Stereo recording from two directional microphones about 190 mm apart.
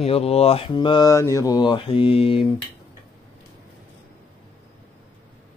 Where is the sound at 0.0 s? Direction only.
30° left (ahead or behind).